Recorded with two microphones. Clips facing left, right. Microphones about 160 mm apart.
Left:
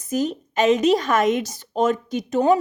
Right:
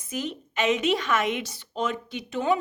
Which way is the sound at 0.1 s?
40° left (ahead or behind).